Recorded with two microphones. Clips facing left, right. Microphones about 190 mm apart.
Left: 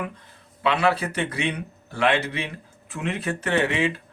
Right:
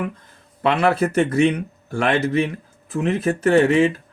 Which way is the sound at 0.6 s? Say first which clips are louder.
Right 4 dB; 50° right (ahead or behind).